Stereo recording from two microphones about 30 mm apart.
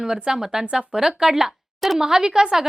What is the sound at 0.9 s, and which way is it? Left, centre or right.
A woman's voice, centre.